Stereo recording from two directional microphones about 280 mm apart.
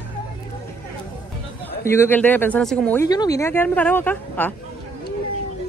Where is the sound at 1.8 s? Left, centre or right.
Centre.